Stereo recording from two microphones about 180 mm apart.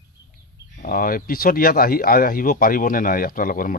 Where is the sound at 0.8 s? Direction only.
50° left (ahead or behind).